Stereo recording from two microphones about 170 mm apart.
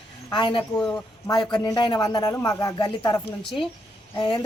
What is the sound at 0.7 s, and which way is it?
Speech, 5° left (ahead or behind).